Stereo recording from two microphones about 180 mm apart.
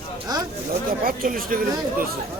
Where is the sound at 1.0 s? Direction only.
50° right (ahead or behind).